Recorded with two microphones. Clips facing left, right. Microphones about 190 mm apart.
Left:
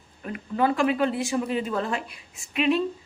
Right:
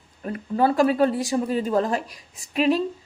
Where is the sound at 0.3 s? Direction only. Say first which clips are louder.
Right 3 dB; 35° right (ahead or behind).